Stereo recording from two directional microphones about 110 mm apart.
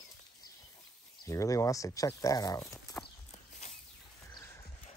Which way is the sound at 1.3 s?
30° left (ahead or behind).